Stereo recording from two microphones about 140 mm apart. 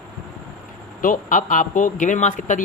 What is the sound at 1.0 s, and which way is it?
Speech, 70° left (ahead or behind).